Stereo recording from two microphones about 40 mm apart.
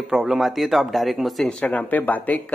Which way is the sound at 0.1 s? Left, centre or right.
Centre.